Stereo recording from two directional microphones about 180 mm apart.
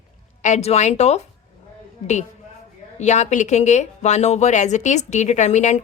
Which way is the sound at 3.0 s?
40° left (ahead or behind).